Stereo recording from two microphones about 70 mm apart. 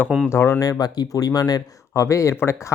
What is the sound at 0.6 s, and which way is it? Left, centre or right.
Speech, left.